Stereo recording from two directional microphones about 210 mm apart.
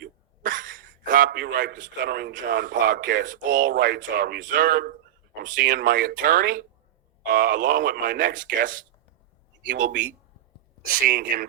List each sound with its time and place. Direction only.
0.0 s a sound: 40° right (ahead or behind)
1.0 s a man's voice: 40° right (ahead or behind)
11.0 s speech: 40° right (ahead or behind)